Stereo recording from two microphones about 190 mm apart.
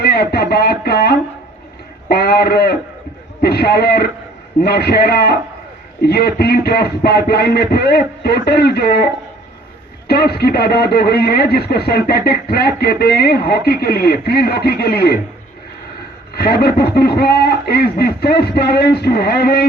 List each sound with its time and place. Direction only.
0.0 s speech: 60° left (ahead or behind)
10.1 s speech: 55° left (ahead or behind)
16.3 s speech: 55° left (ahead or behind)